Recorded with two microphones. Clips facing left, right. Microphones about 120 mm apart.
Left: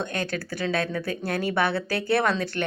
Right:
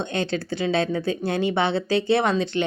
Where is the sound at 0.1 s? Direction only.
25° right (ahead or behind).